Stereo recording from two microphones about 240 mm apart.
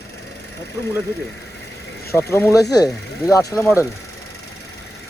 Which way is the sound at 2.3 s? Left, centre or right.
Centre.